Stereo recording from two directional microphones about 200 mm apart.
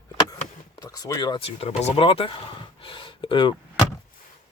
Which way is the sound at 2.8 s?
25° left (ahead or behind).